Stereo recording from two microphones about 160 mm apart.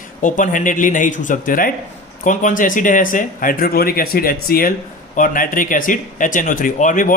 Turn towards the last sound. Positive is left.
turn(degrees=55)  # may be behind; listen again after turning